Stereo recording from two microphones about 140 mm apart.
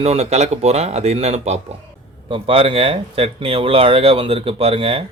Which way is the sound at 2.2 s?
40° right (ahead or behind).